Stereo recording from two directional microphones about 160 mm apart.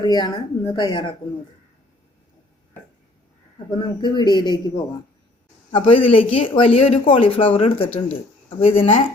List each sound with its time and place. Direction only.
0.0 s speech: 25° left (ahead or behind)
3.7 s speech: 30° left (ahead or behind)
5.7 s speech: 35° left (ahead or behind)